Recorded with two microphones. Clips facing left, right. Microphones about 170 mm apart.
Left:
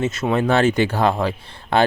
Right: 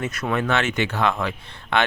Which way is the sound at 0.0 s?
25° left (ahead or behind).